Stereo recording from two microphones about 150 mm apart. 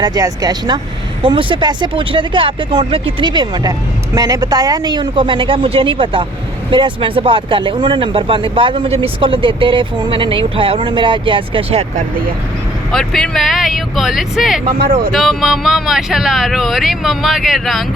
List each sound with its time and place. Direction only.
0.0 s speech: 25° right (ahead or behind); by 12.0 s 45° right (ahead or behind)
12.9 s speech: 5° left (ahead or behind)